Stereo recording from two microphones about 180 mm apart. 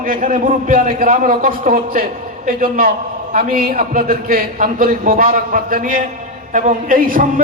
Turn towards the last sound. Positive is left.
turn(degrees=-50)  # may be behind; listen again after turning